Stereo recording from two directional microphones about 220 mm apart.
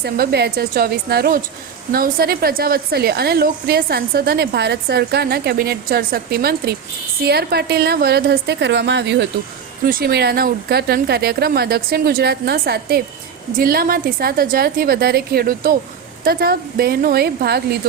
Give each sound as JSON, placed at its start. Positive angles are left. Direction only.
{"t": 0.0, "sound": "a woman's voice", "side_deg": -45}